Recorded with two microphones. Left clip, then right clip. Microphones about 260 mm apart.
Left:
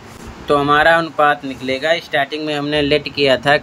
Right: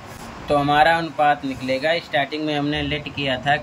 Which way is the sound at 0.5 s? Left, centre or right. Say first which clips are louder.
Left 4 dB; centre.